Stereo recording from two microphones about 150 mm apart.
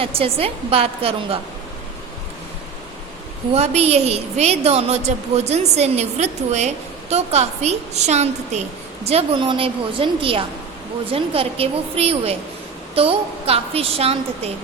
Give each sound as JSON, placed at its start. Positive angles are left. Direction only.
{"t": 0.0, "sound": "a woman's voice", "side_deg": -40}
{"t": 3.5, "sound": "a woman's voice", "side_deg": -45}